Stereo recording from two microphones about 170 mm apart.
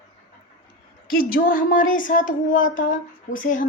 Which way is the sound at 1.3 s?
55° left (ahead or behind).